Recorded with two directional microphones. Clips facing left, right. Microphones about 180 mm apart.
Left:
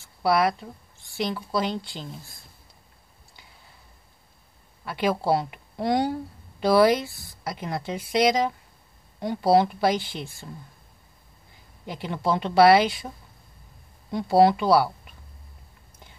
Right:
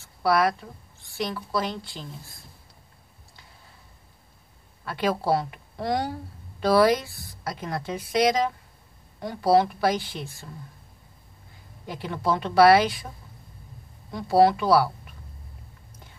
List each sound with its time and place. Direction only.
0.2 s speech: 15° left (ahead or behind)
4.8 s speech: 15° left (ahead or behind)
11.8 s speech: 20° left (ahead or behind)
14.1 s speech: 15° left (ahead or behind)